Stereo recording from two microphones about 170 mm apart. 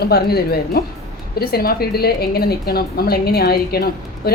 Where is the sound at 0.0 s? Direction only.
65° left (ahead or behind).